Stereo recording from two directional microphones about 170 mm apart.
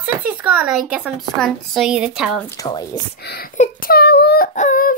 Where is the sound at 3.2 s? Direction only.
70° left (ahead or behind).